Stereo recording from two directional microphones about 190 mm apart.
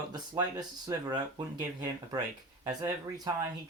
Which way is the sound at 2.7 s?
20° right (ahead or behind).